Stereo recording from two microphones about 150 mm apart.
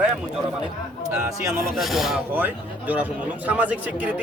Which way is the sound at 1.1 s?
20° right (ahead or behind).